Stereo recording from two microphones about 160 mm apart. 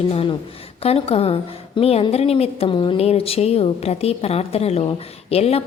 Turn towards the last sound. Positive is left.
turn(degrees=40)  # may be behind; listen again after turning